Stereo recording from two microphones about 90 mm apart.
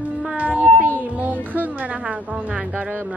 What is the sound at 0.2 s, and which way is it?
Music, 15° right (ahead or behind).